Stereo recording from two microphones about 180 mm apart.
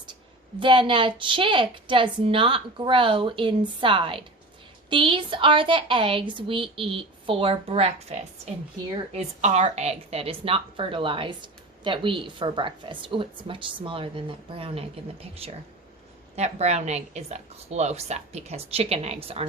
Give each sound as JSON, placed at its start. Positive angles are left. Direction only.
{"t": 0.6, "sound": "a woman's voice", "side_deg": -25}